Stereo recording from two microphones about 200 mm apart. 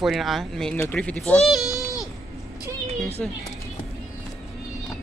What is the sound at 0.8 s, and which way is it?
Speech, 5° left (ahead or behind).